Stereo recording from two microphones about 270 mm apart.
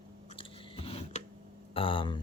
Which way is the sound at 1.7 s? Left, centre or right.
Centre.